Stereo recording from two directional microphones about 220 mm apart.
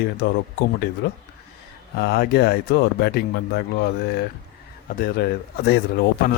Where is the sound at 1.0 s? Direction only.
45° left (ahead or behind).